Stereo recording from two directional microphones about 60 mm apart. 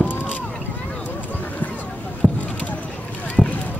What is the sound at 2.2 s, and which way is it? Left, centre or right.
Clip-clop, centre.